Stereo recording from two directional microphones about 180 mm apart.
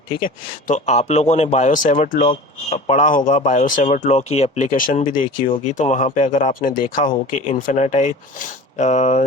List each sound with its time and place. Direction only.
0.7 s speech: 40° left (ahead or behind)